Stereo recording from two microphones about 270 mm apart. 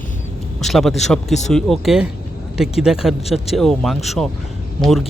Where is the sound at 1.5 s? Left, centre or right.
Centre.